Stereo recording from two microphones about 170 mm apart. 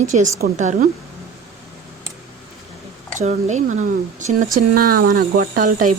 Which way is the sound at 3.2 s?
45° right (ahead or behind).